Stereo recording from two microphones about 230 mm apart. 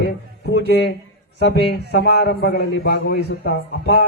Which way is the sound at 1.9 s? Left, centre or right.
Left.